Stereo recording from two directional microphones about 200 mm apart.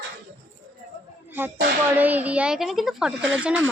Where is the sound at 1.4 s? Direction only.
10° right (ahead or behind).